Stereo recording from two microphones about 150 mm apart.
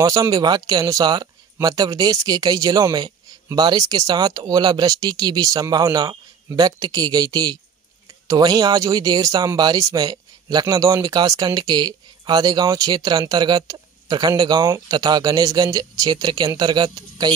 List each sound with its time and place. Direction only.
0.0 s speech: 25° right (ahead or behind)